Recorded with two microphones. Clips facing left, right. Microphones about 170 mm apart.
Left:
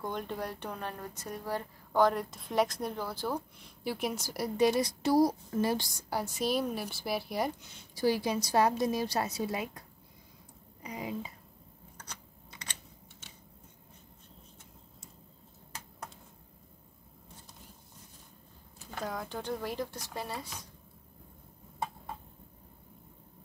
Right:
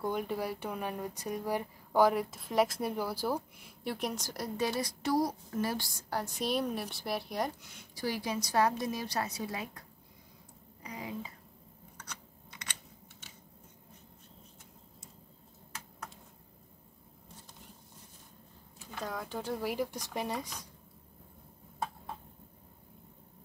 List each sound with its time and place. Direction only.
0.0 s speech: 10° right (ahead or behind)
3.8 s a woman's voice: 5° left (ahead or behind)
7.6 s a woman's voice: 30° left (ahead or behind)
19.0 s speech: centre (ahead or behind); by 20.6 s 15° right (ahead or behind)